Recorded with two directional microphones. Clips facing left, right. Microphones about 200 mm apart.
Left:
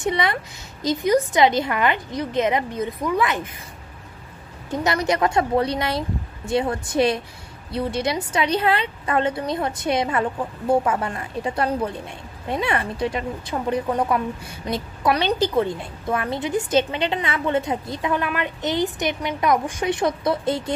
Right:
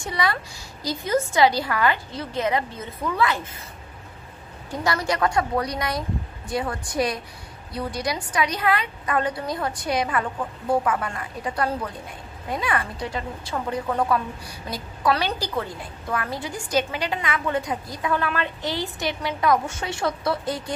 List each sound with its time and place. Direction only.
0.0 s a woman's voice: 20° left (ahead or behind)
4.6 s a woman's voice: 20° left (ahead or behind)